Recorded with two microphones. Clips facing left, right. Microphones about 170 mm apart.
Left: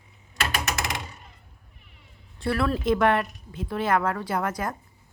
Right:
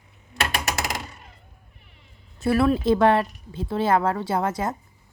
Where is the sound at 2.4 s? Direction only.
20° right (ahead or behind).